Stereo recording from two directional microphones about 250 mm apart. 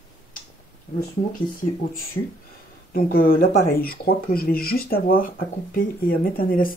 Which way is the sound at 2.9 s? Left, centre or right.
Left.